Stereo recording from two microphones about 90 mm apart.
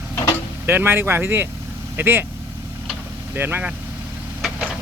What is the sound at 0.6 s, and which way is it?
Speech, 25° right (ahead or behind).